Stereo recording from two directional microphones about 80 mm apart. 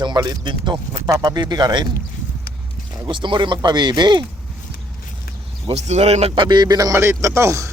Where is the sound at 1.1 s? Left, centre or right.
Right.